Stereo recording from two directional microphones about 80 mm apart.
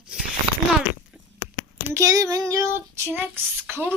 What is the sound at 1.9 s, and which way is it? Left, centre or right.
Speech, right.